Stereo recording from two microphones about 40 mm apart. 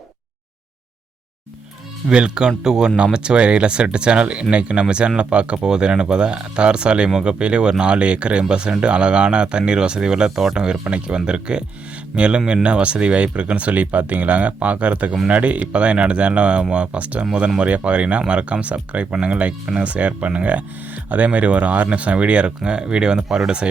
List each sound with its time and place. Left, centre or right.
2.0 s speech: right
10.4 s speech: centre
10.8 s speech: right